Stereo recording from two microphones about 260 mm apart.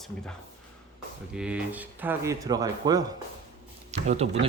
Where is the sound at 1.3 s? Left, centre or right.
Centre.